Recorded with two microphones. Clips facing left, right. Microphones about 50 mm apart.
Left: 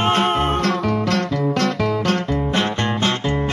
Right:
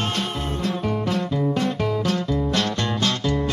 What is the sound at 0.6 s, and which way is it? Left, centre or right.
Music, left.